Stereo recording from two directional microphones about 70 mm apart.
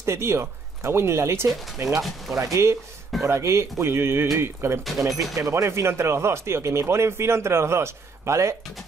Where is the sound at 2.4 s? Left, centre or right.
Right.